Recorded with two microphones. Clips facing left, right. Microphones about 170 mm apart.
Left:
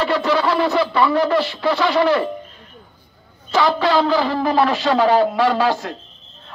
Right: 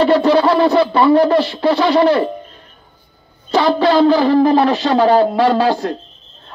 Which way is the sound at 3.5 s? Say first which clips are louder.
Right 4 dB; 30° right (ahead or behind).